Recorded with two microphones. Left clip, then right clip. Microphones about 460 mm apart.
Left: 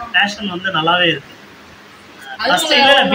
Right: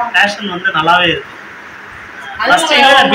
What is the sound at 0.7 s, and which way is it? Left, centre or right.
Speech, left.